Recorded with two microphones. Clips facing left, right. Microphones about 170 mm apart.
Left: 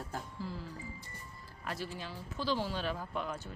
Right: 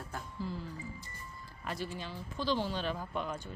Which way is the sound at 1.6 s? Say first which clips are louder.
Right 1 dB; centre (ahead or behind).